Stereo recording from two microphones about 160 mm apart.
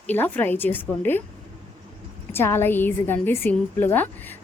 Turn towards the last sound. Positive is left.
turn(degrees=10)  # may be behind; listen again after turning